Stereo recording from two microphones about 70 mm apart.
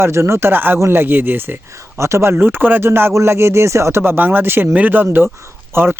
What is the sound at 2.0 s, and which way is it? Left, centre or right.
Speech, right.